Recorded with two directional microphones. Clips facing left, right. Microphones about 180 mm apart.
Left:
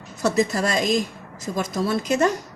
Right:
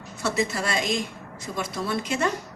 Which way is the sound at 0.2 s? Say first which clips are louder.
Left 5 dB; 40° left (ahead or behind).